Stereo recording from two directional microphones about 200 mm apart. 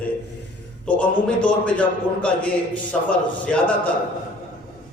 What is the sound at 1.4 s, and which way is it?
A man's voice, 5° left (ahead or behind).